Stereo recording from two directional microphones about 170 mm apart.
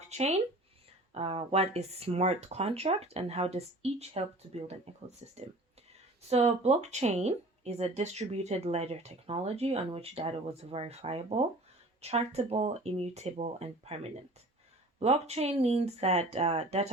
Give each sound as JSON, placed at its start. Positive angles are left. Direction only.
{"t": 0.1, "sound": "speech", "side_deg": -40}